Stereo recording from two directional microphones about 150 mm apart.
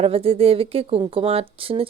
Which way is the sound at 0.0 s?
40° right (ahead or behind).